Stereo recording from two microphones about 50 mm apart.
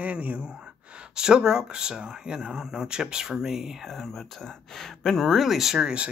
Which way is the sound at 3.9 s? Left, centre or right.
Centre.